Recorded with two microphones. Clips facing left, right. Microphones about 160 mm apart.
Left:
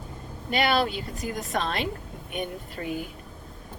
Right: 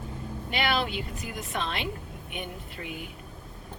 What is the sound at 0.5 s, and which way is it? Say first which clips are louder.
Speech: left 4 dB; 40° left (ahead or behind).